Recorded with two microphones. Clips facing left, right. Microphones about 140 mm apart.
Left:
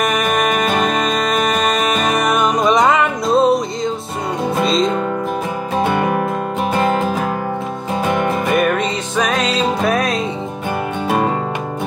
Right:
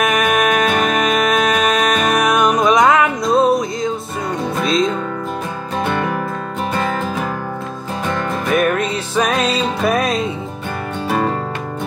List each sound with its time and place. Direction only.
0.0 s music: centre (ahead or behind)
5.9 s music: 15° left (ahead or behind)
8.5 s music: centre (ahead or behind)
11.1 s music: 15° left (ahead or behind)